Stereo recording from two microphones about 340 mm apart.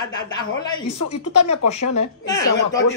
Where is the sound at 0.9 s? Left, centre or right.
Left.